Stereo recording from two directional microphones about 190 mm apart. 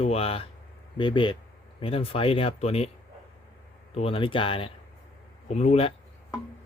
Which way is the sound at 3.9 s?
30° left (ahead or behind).